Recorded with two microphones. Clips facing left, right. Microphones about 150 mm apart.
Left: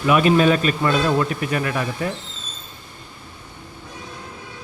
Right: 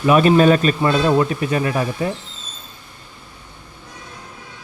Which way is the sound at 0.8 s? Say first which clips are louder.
Right 2 dB; 25° right (ahead or behind).